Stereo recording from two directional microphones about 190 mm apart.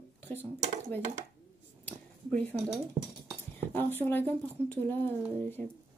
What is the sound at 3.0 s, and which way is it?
Speech, 20° right (ahead or behind).